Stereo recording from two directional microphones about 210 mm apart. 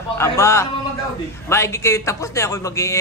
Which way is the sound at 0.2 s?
15° left (ahead or behind).